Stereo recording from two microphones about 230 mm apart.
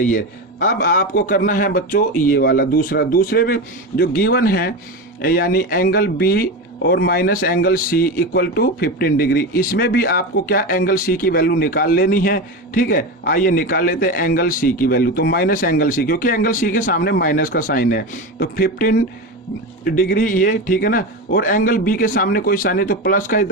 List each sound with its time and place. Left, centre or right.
0.0 s speech: left